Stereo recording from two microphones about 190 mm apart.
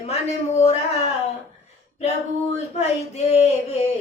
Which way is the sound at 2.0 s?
35° left (ahead or behind).